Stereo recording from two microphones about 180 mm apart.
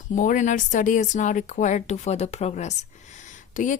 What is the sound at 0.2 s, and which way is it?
Speech, 45° left (ahead or behind).